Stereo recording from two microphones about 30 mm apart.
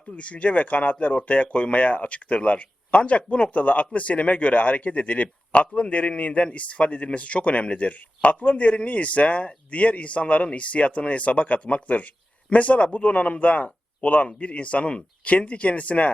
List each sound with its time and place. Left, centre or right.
0.2 s speech: left